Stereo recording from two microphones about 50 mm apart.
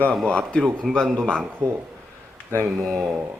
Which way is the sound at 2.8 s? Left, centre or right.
Centre.